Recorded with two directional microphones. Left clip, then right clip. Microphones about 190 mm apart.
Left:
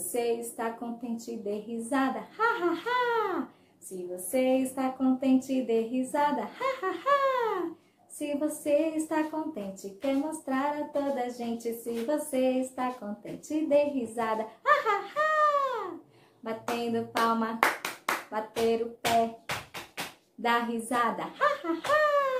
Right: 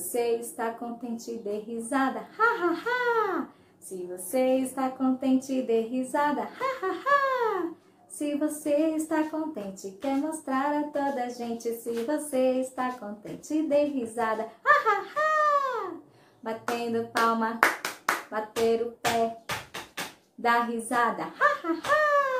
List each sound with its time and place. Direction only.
0.1 s a sound: centre (ahead or behind)
16.4 s hands: centre (ahead or behind)
20.4 s speech: centre (ahead or behind)